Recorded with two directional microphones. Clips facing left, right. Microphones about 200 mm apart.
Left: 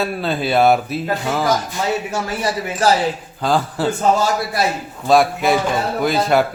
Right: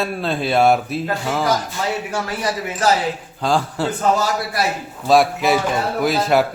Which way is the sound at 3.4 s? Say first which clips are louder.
Left 1 dB; centre (ahead or behind).